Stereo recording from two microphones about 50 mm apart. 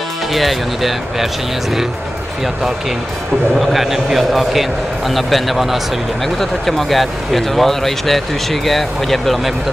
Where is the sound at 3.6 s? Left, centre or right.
Centre.